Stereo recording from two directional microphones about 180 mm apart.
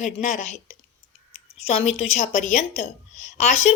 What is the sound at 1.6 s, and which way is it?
A woman's voice, 35° left (ahead or behind).